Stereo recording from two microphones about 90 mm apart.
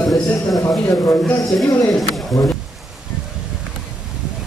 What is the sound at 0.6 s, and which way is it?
Speech, 35° left (ahead or behind).